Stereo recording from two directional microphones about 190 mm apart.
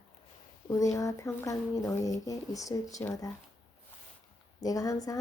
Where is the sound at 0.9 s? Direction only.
15° left (ahead or behind).